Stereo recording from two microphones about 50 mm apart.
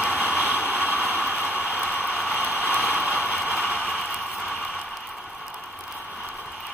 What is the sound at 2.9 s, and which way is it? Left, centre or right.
Vehicle, right.